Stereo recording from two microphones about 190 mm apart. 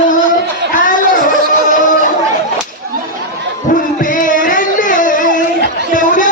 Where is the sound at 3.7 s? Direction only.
45° left (ahead or behind).